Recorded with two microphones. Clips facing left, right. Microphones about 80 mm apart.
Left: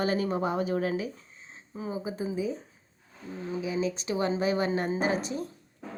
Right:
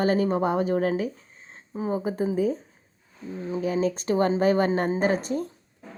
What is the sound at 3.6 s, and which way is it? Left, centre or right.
A woman's voice, right.